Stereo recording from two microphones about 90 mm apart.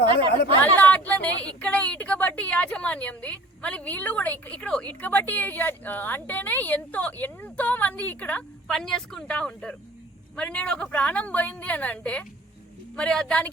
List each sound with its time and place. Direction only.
0.1 s speech: 85° right
0.6 s a woman's voice: 20° left (ahead or behind)